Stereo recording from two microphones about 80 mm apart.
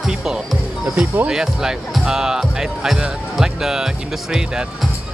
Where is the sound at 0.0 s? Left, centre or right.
Centre.